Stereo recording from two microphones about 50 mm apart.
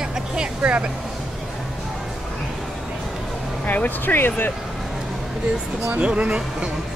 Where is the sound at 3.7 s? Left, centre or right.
Left.